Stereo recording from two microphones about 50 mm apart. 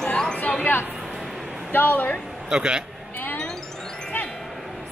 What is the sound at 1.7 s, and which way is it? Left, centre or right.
Speech, left.